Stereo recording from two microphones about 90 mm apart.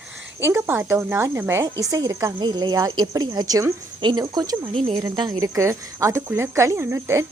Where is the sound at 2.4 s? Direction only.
50° right (ahead or behind).